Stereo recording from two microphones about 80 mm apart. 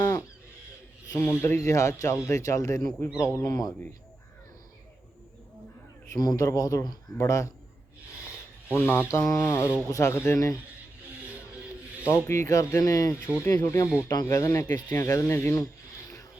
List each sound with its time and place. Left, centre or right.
1.2 s speech: left
6.1 s speech: left
8.7 s speech: left
12.0 s speech: left
12.7 s speech: left
13.1 s speech: left
14.1 s speech: left